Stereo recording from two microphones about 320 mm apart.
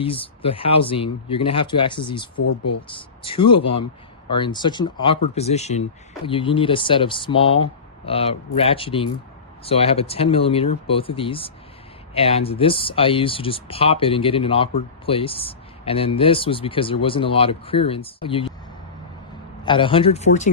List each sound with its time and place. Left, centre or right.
0.0 s speech: centre
2.4 s speech: left
2.8 s speech: centre
19.6 s speech: centre